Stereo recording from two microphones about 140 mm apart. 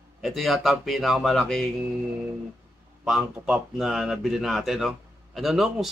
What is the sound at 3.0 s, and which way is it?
Speech, 5° right (ahead or behind).